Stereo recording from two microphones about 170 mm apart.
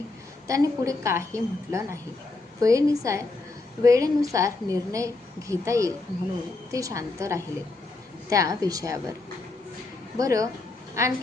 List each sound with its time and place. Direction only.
0.4 s a woman's voice: 20° right (ahead or behind)
10.2 s a woman's voice: 20° right (ahead or behind)